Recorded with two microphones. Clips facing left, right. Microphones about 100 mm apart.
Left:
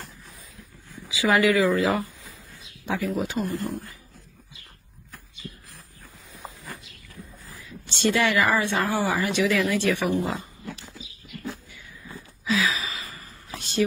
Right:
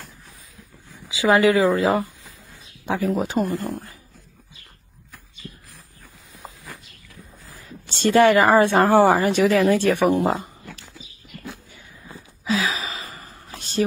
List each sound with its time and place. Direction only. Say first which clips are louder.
1.0 s speech: right 4 dB; 30° right (ahead or behind)
3.4 s speech: right 3 dB; centre (ahead or behind)
7.8 s speech: right 7 dB; 40° right (ahead or behind)
10.6 s dog: left 3 dB; centre (ahead or behind)
12.4 s gasp: right 1 dB; 35° right (ahead or behind)
13.6 s a sound: right 2 dB; 40° right (ahead or behind)